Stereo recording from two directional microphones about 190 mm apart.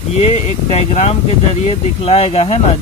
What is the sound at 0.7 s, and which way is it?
Speech, 35° left (ahead or behind).